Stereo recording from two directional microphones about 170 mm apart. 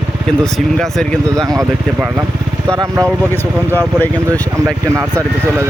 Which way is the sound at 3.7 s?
10° left (ahead or behind).